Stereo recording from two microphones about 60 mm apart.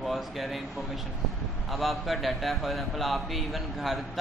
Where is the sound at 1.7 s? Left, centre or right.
Centre.